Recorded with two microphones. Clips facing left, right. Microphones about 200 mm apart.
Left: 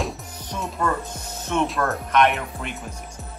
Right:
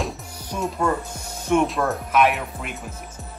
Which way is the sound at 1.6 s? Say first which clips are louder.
Right 1 dB; centre (ahead or behind).